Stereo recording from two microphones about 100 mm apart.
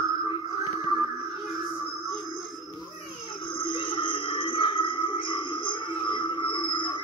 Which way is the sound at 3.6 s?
55° left (ahead or behind).